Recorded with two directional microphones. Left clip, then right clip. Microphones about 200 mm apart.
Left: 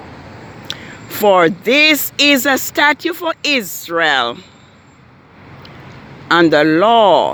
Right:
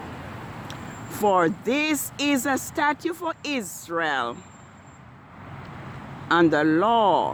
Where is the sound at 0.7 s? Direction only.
20° left (ahead or behind).